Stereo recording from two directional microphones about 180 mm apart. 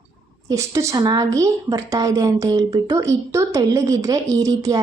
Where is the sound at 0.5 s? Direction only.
15° right (ahead or behind).